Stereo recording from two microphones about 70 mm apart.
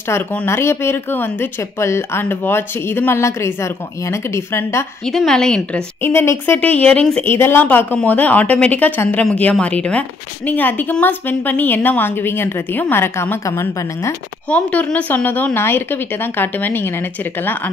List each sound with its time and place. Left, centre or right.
0.5 s a woman's voice: left
1.6 s a woman's voice: left
5.0 s a woman's voice: centre
5.9 s a woman's voice: left; by 7.2 s centre
7.2 s a woman's voice: left
7.6 s a woman's voice: left
14.5 s a woman's voice: centre